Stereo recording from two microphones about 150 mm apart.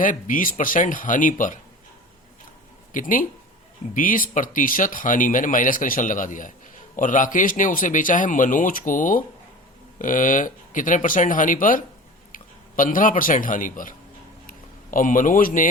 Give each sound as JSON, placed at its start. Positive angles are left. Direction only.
{"t": 0.0, "sound": "speech", "side_deg": 60}
{"t": 2.9, "sound": "a man's voice", "side_deg": 65}
{"t": 14.4, "sound": "a sound", "side_deg": 65}